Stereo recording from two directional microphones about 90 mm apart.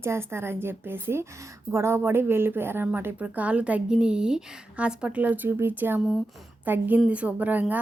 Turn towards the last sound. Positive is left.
turn(degrees=-20)  # may be behind; listen again after turning